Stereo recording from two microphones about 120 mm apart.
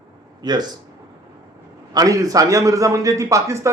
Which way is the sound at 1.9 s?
30° right (ahead or behind).